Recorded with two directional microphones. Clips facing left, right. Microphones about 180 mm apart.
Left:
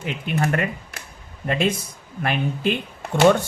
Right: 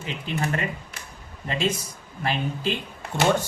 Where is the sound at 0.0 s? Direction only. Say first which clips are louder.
Left 4 dB; 60° left (ahead or behind).